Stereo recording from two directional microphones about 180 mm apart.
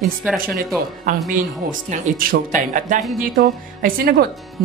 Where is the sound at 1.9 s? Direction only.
50° right (ahead or behind).